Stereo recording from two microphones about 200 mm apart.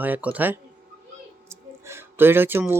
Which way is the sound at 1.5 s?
15° right (ahead or behind).